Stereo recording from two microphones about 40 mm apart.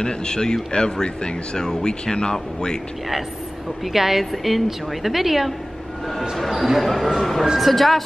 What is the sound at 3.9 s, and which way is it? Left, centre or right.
Speech, centre.